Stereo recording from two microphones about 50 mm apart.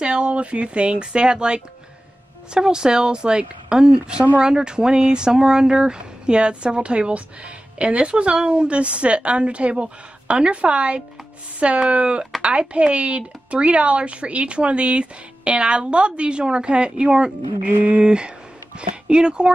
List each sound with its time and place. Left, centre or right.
0.0 s speech: right
17.6 s speech: right
18.0 s speech: centre